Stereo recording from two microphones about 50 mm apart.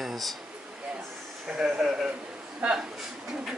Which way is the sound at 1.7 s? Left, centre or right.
Centre.